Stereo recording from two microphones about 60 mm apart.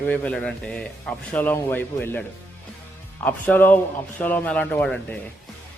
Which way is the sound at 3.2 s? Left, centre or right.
Left.